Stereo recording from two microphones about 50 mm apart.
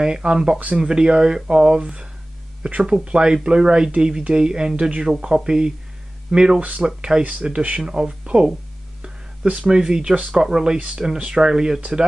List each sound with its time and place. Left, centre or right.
0.0 s speech: centre
9.6 s speech: centre